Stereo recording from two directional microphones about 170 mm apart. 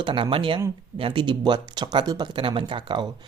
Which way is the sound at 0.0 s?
30° right (ahead or behind).